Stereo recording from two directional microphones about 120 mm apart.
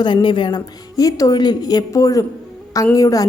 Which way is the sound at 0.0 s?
40° left (ahead or behind).